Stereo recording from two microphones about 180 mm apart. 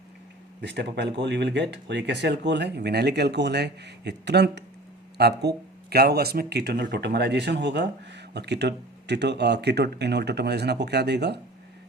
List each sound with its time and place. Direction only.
0.6 s speech: 75° right (ahead or behind)